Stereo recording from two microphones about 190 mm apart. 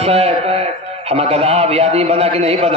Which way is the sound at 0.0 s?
30° right (ahead or behind).